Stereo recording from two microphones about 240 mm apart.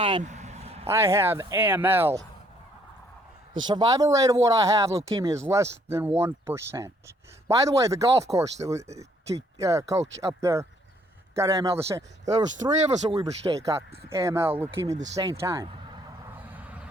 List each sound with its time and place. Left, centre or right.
0.0 s vehicle: right
0.9 s speech: centre
3.7 s speech: centre
16.5 s vehicle: centre